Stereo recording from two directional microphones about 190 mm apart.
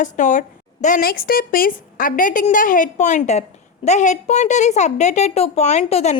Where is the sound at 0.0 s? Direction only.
40° left (ahead or behind).